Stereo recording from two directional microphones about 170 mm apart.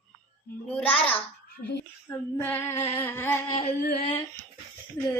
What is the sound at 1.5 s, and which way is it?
Speech, 70° left (ahead or behind).